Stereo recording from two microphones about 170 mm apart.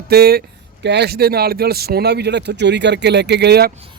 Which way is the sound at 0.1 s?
70° right (ahead or behind).